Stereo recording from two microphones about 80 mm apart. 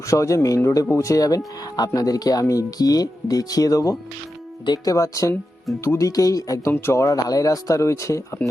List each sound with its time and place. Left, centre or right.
0.1 s speech: left
6.7 s speech: left